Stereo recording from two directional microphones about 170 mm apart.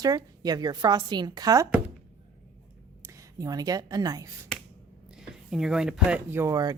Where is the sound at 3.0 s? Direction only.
20° right (ahead or behind).